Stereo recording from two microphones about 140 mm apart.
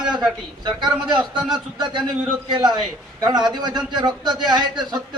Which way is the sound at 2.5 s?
30° right (ahead or behind).